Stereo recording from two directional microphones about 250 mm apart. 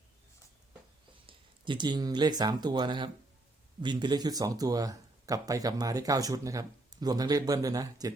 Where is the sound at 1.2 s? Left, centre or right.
Centre.